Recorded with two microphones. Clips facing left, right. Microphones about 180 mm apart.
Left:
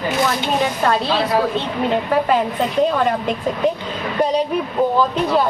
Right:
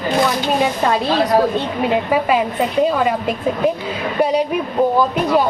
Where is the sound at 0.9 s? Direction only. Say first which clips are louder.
Right 2 dB; 10° right (ahead or behind).